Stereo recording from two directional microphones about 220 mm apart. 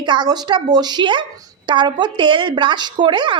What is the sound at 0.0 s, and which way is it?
A woman's voice, 20° right (ahead or behind).